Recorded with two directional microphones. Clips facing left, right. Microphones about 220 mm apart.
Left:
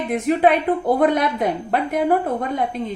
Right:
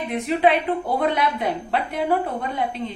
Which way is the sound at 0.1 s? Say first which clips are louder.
Left 3 dB; 45° left (ahead or behind).